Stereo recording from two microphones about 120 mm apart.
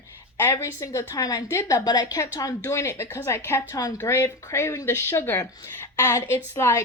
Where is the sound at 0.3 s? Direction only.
25° left (ahead or behind).